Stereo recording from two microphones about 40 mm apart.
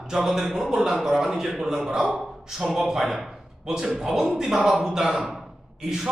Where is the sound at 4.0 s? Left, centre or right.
Centre.